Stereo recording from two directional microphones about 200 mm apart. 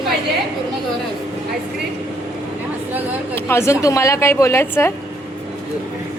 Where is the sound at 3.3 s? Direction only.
15° left (ahead or behind).